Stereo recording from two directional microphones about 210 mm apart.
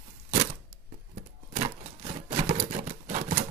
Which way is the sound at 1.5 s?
30° right (ahead or behind).